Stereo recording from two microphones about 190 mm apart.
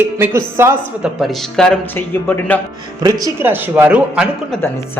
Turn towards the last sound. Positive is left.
turn(degrees=-5)  # may be behind; listen again after turning